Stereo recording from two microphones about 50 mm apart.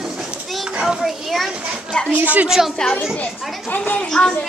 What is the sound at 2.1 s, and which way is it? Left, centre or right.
Speech, right.